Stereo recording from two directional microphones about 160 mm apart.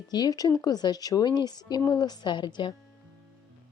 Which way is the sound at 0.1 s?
25° left (ahead or behind).